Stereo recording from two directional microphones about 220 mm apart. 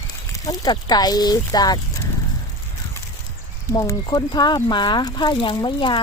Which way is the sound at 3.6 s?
15° left (ahead or behind).